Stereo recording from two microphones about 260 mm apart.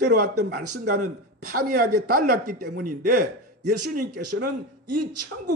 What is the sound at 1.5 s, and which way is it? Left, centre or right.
A man's voice, right.